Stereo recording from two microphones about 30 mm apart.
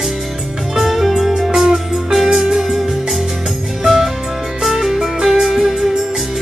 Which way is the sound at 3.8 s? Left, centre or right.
Centre.